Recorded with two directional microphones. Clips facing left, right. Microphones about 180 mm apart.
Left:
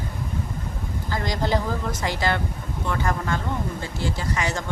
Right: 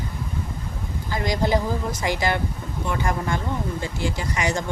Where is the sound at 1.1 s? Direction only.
15° right (ahead or behind).